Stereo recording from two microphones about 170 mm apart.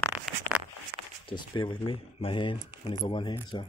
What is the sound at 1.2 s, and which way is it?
Speech, 30° left (ahead or behind).